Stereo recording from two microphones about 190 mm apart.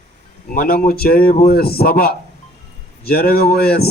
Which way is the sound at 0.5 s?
50° left (ahead or behind).